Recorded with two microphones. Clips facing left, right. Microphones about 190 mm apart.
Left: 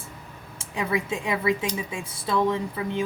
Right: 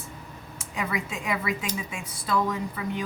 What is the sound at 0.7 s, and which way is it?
A woman's voice, 25° left (ahead or behind).